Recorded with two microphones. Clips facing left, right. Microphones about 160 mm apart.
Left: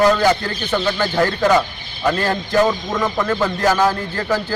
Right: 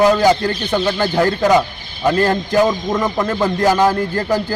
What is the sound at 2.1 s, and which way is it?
Speech, 40° right (ahead or behind).